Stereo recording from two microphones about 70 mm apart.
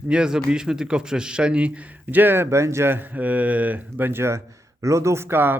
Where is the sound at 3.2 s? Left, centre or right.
Right.